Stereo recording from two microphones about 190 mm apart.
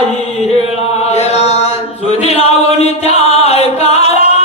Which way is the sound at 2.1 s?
35° left (ahead or behind).